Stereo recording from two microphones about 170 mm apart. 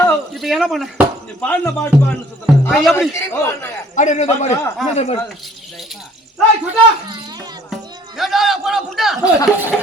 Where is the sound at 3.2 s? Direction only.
15° left (ahead or behind).